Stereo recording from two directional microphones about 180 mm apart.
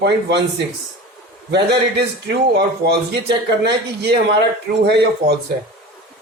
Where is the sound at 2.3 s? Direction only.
70° right (ahead or behind).